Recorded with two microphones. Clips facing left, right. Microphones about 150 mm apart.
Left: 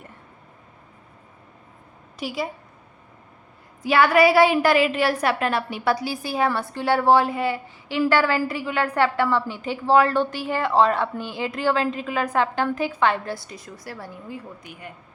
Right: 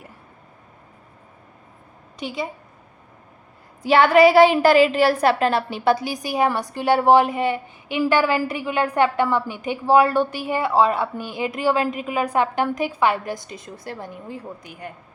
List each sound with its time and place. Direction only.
2.1 s a woman's voice: 5° left (ahead or behind)
3.8 s a woman's voice: 25° right (ahead or behind)
14.3 s a woman's voice: 40° right (ahead or behind)